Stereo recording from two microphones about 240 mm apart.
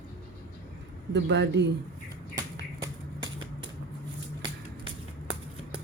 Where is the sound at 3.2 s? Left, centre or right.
Right.